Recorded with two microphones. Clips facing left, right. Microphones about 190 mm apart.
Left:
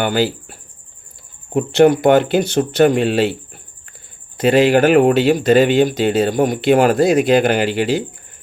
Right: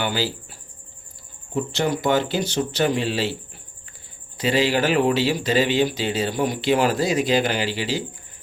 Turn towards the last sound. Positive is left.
turn(degrees=55)  # may be behind; listen again after turning